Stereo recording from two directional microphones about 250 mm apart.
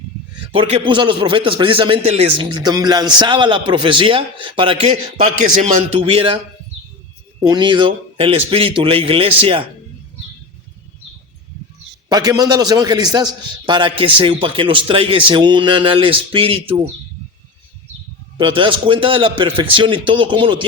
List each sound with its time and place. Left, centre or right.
0.5 s a man's voice: centre
7.4 s a man's voice: centre
12.0 s a man's voice: centre
18.3 s a man's voice: centre